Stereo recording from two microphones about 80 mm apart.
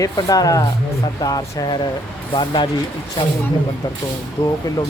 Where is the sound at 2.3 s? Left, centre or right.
Left.